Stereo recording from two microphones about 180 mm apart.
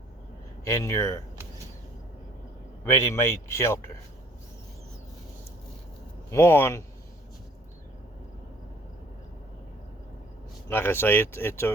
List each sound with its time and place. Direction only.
0.6 s speech: 15° left (ahead or behind)
2.8 s speech: 15° left (ahead or behind)
6.3 s speech: 15° left (ahead or behind)
10.7 s speech: 10° left (ahead or behind)